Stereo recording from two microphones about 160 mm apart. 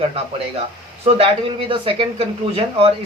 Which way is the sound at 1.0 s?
35° right (ahead or behind).